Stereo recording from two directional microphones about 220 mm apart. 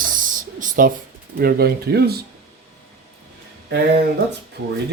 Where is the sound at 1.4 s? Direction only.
45° right (ahead or behind).